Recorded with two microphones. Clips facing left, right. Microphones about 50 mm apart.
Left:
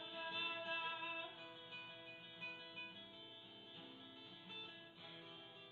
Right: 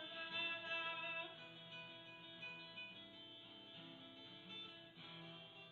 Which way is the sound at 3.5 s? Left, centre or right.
Centre.